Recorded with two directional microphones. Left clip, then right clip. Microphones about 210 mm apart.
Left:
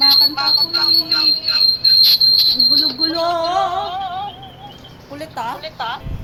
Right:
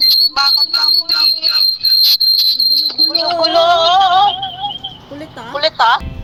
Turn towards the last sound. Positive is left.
turn(degrees=-45)  # may be behind; listen again after turning